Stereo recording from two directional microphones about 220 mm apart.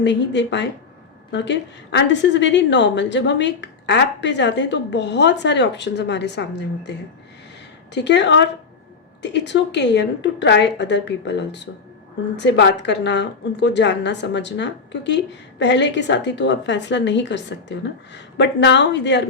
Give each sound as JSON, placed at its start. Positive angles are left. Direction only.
{"t": 0.0, "sound": "a woman's voice", "side_deg": 55}
{"t": 7.9, "sound": "a woman's voice", "side_deg": 50}